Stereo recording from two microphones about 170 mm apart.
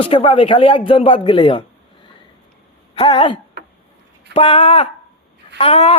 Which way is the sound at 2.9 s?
30° left (ahead or behind).